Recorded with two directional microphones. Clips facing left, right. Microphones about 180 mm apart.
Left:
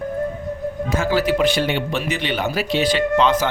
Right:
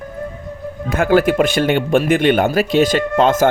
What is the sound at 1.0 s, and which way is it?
Speech, 55° right (ahead or behind).